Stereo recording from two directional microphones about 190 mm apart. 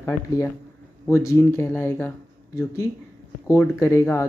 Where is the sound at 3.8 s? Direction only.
15° left (ahead or behind).